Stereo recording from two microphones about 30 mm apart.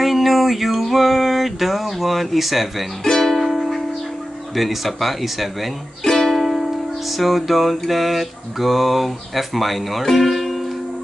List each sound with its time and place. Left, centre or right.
0.0 s a sound: centre
0.7 s speech: centre
3.0 s speech: centre
3.3 s music: centre
4.6 s mantra: centre
6.0 s music: centre
6.3 s music: centre
7.1 s mantra: centre